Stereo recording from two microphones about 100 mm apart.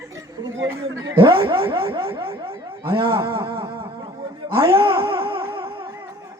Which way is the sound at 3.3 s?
60° right (ahead or behind).